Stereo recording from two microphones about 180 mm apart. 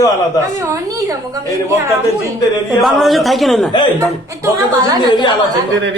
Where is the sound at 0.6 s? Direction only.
15° right (ahead or behind).